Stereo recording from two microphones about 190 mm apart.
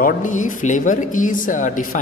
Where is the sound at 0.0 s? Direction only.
40° left (ahead or behind).